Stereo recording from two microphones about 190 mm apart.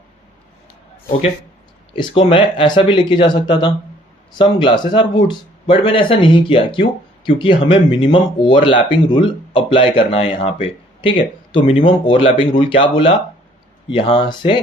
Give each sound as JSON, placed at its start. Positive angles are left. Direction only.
{"t": 1.9, "sound": "speech", "side_deg": 25}
{"t": 11.6, "sound": "speech", "side_deg": 40}
{"t": 12.0, "sound": "speech", "side_deg": 25}